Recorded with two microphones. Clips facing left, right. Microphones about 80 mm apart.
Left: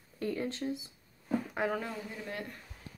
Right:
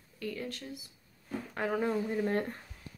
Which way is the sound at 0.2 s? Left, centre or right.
Left.